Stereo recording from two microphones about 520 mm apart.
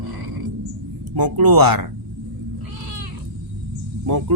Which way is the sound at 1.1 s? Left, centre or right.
Right.